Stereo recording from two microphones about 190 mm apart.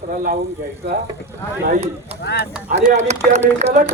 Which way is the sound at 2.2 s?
60° left (ahead or behind).